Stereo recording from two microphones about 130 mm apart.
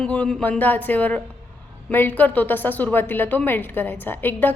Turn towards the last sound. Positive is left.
turn(degrees=15)  # may be behind; listen again after turning